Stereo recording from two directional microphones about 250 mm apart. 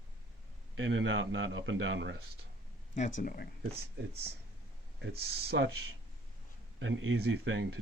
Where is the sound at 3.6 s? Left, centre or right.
Right.